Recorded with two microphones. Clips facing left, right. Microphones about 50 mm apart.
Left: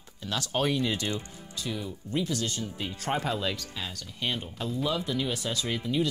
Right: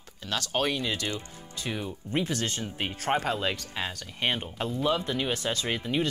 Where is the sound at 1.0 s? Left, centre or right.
Right.